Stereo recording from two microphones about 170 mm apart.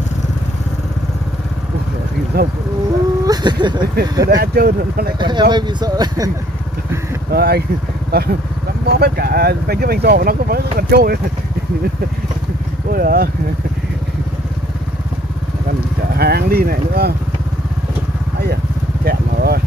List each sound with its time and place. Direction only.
2.3 s speech: 65° right (ahead or behind)
3.3 s speech: 25° right (ahead or behind)
4.4 s speech: 65° right (ahead or behind)
5.2 s speech: 25° right (ahead or behind)
7.2 s speech: 65° right (ahead or behind)
12.9 s speech: 60° right (ahead or behind)
16.2 s speech: 70° right (ahead or behind)
19.0 s vehicle: 65° right (ahead or behind)